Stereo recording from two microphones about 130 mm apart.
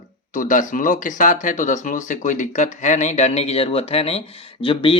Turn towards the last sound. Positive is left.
turn(degrees=40)  # may be behind; listen again after turning